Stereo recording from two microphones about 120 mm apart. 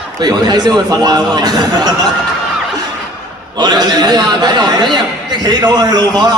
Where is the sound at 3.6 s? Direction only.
35° right (ahead or behind).